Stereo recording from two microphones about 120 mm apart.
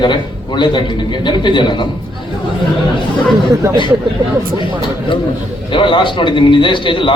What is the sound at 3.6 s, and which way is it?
Speech, 25° right (ahead or behind).